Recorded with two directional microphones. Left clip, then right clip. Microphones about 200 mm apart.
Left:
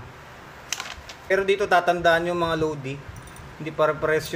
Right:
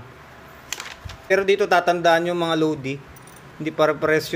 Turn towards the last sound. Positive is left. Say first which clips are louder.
# right 3 dB
turn(degrees=-30)  # may be behind; listen again after turning